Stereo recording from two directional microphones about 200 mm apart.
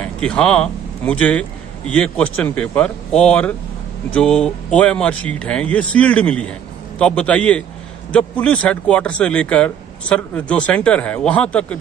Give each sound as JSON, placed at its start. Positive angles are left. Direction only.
{"t": 0.0, "sound": "speech", "side_deg": 5}